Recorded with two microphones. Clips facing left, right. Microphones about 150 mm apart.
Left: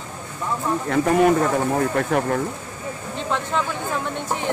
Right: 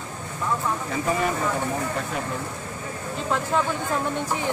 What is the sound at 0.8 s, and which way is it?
Speech, 65° left (ahead or behind).